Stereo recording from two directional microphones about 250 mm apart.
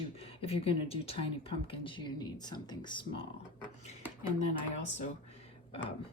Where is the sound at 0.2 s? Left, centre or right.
Left.